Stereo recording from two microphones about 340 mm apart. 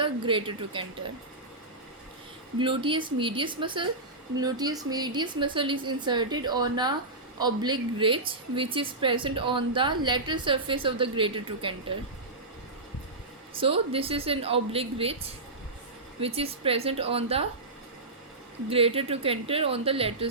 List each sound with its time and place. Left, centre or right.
0.0 s a woman's voice: centre
2.6 s a woman's voice: centre
13.5 s a woman's voice: centre
18.7 s a woman's voice: centre